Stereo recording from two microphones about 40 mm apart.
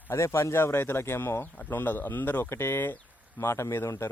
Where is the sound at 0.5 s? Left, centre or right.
Left.